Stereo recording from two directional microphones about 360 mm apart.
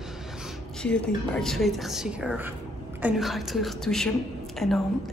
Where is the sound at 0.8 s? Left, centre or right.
Centre.